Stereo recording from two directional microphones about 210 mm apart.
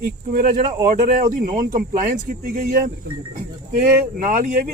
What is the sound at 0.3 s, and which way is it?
Speech, 35° right (ahead or behind).